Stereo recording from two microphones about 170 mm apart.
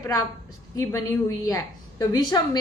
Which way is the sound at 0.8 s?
15° left (ahead or behind).